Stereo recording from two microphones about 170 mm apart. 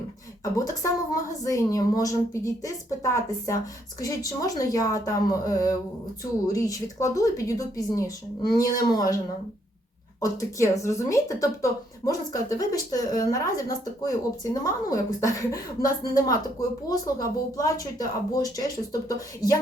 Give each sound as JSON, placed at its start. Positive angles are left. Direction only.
{"t": 0.5, "sound": "speech", "side_deg": 20}
{"t": 10.2, "sound": "speech", "side_deg": 20}